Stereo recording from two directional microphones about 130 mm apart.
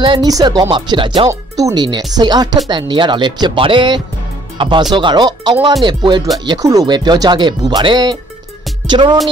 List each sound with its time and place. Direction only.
0.0 s speech: 35° right (ahead or behind)
1.3 s speech: 25° right (ahead or behind)